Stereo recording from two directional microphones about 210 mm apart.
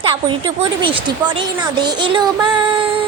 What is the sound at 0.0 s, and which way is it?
Speech, 25° right (ahead or behind).